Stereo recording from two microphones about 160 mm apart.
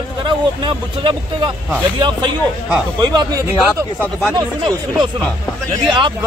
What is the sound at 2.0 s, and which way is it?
Speech, 30° right (ahead or behind).